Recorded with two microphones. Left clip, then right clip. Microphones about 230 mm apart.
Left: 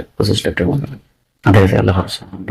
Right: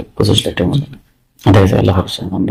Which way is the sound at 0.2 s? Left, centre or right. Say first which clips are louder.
Right 2 dB; centre.